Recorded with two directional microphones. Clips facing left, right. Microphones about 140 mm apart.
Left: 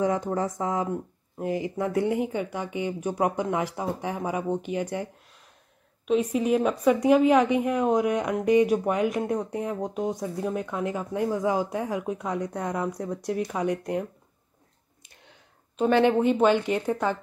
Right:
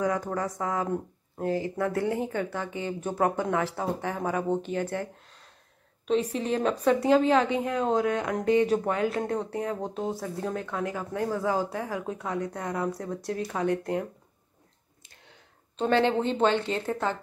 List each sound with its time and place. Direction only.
0.0 s speech: 25° left (ahead or behind)
15.7 s speech: 15° left (ahead or behind)